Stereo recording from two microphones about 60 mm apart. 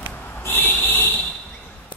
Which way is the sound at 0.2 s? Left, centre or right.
Left.